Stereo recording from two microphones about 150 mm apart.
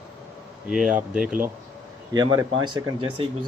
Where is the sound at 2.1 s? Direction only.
30° right (ahead or behind).